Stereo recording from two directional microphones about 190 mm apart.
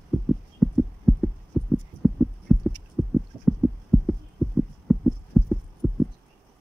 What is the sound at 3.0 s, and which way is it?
Heart sounds, centre (ahead or behind).